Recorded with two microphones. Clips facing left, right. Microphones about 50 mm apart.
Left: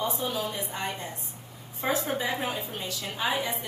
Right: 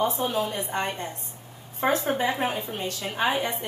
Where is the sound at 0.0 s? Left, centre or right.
Right.